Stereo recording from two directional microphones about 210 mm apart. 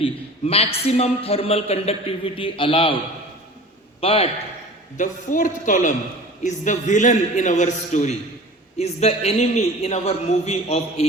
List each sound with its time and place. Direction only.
0.0 s a man's voice: 30° left (ahead or behind)
4.0 s a man's voice: 30° left (ahead or behind)